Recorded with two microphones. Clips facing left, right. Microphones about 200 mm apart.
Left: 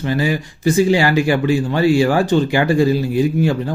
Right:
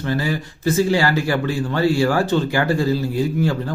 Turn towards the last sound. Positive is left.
turn(degrees=15)  # may be behind; listen again after turning